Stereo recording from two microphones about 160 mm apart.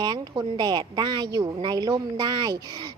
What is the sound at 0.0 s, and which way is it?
A woman's voice, 30° right (ahead or behind).